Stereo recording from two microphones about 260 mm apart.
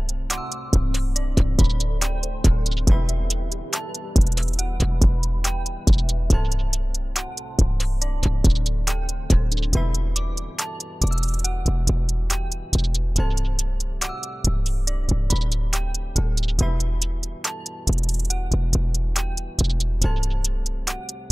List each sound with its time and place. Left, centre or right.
0.3 s music: centre